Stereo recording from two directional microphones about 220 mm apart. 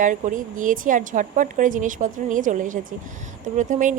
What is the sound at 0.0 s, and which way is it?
A woman's voice, 35° right (ahead or behind).